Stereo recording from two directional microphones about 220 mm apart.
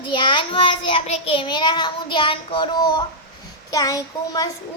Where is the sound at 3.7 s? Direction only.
15° left (ahead or behind).